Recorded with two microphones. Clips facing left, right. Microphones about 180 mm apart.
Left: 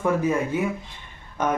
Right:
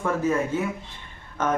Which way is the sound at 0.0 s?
15° left (ahead or behind).